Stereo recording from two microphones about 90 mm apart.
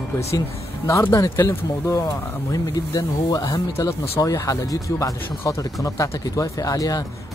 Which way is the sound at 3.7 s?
30° left (ahead or behind).